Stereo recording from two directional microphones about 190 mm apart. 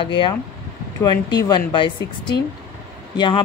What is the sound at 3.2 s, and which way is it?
Speech, 25° left (ahead or behind).